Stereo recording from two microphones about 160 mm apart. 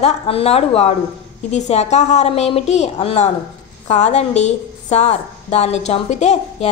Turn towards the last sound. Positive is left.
turn(degrees=45)  # may be behind; listen again after turning